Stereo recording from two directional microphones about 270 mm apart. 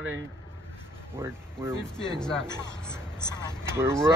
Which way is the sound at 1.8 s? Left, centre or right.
Centre.